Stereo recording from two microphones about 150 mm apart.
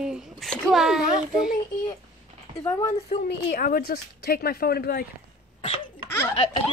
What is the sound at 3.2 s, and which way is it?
Speech, 85° left.